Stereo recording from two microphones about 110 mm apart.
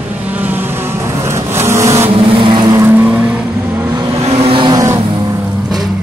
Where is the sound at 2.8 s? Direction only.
15° right (ahead or behind).